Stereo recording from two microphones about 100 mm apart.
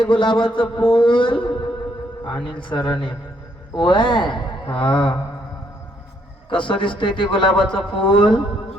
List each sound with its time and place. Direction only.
0.0 s a man's voice: 55° left (ahead or behind)
6.5 s a man's voice: 55° left (ahead or behind)